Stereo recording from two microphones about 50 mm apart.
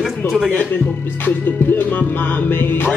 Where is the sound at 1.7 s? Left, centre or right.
Left.